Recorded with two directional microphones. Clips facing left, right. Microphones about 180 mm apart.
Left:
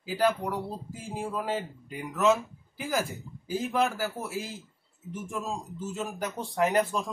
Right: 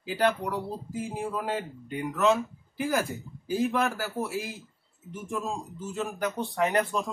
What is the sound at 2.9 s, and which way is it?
Speech, 60° right (ahead or behind).